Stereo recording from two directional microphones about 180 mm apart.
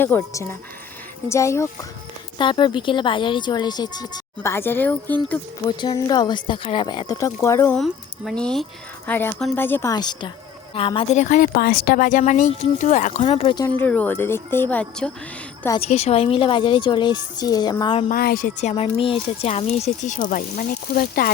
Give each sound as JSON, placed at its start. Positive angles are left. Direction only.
{"t": 0.0, "sound": "speech", "side_deg": 10}
{"t": 2.4, "sound": "speech", "side_deg": 25}
{"t": 5.8, "sound": "speech", "side_deg": 25}
{"t": 7.7, "sound": "speech", "side_deg": 0}
{"t": 9.9, "sound": "speech", "side_deg": 25}
{"t": 13.7, "sound": "speech", "side_deg": 10}
{"t": 15.8, "sound": "speech", "side_deg": 35}
{"t": 18.1, "sound": "speech", "side_deg": 55}